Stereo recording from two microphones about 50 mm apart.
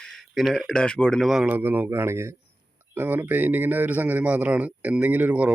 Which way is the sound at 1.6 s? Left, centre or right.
Right.